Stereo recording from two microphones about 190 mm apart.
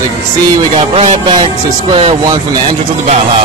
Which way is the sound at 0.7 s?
35° right (ahead or behind).